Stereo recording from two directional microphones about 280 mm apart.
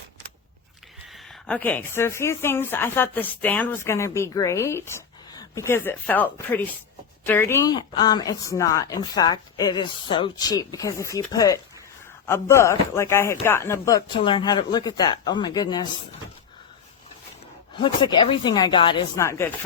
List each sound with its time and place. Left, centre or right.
1.1 s speech: centre
17.7 s speech: centre